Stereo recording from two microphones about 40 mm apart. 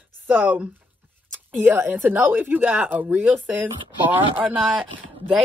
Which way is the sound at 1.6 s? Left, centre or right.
Right.